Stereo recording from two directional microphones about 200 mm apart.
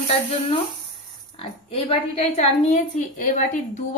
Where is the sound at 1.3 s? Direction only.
30° left (ahead or behind).